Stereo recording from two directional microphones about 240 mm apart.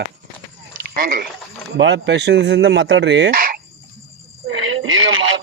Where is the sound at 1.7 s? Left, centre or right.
Right.